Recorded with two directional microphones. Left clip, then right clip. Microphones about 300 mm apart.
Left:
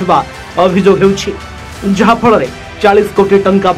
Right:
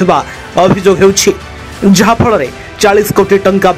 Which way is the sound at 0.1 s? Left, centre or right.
Right.